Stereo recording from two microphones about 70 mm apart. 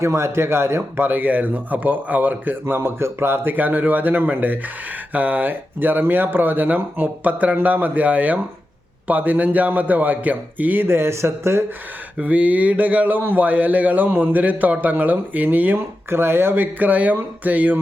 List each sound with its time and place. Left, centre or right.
0.0 s speech: right
12.2 s speech: right